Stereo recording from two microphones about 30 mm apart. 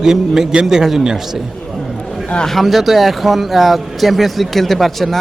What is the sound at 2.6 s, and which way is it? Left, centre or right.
A man's voice, centre.